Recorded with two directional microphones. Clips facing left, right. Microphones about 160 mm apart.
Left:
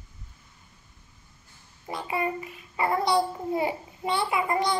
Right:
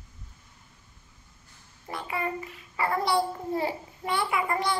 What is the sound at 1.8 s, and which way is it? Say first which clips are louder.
Child singing: left 3 dB; 20° left (ahead or behind).